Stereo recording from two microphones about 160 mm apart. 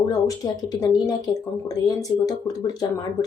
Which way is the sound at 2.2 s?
25° left (ahead or behind).